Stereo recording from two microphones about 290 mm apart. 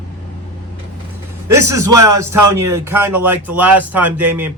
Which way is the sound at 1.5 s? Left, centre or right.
Right.